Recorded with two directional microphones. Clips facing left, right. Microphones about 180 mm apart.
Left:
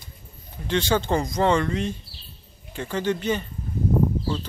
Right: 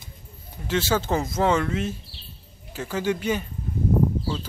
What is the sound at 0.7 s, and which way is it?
A man's voice, 5° right (ahead or behind).